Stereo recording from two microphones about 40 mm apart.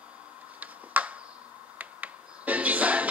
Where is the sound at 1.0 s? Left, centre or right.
Right.